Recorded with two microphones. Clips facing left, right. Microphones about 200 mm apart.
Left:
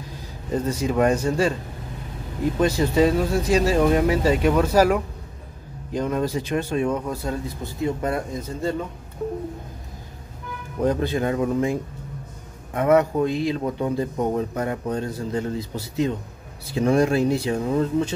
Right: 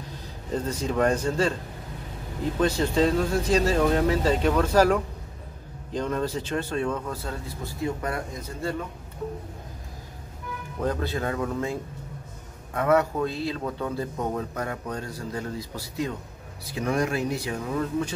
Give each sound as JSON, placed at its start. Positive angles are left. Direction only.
{"t": 0.5, "sound": "a man's voice", "side_deg": 10}
{"t": 2.6, "sound": "a man's voice", "side_deg": 10}
{"t": 10.8, "sound": "a man's voice", "side_deg": 15}